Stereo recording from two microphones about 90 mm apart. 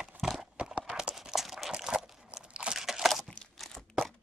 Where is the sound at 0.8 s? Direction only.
10° right (ahead or behind).